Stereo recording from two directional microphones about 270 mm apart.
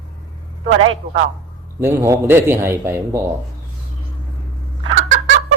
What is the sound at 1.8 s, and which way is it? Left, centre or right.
A man's voice, centre.